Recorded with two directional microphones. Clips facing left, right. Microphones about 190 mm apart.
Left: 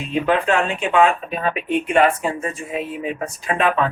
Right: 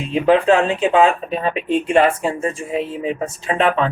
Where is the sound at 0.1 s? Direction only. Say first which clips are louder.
Right 5 dB; 30° right (ahead or behind).